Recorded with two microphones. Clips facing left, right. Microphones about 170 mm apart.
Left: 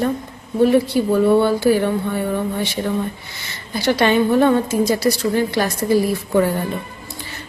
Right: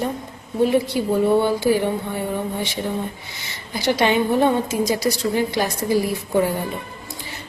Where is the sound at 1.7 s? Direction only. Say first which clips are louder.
Left 3 dB; 20° right (ahead or behind).